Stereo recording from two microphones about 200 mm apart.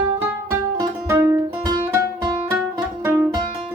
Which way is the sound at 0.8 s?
15° right (ahead or behind).